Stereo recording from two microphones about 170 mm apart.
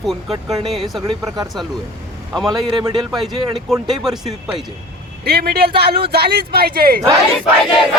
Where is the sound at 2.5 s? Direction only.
25° right (ahead or behind).